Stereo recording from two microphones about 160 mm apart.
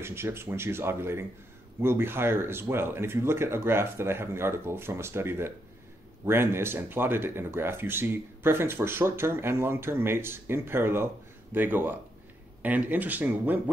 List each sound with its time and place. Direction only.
0.0 s speech: 15° right (ahead or behind)